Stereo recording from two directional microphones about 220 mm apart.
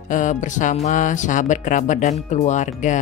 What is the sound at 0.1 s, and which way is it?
Speech, 35° left (ahead or behind).